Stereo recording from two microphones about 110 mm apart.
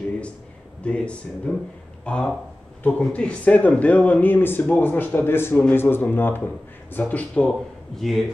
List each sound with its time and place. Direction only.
0.8 s speech: 10° left (ahead or behind)